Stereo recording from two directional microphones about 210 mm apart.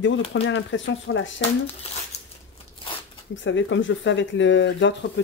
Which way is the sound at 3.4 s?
60° left (ahead or behind).